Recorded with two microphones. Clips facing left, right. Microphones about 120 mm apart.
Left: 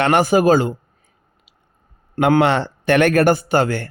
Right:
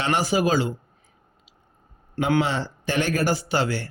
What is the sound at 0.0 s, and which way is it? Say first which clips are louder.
Speech: left 8 dB; 60° left (ahead or behind).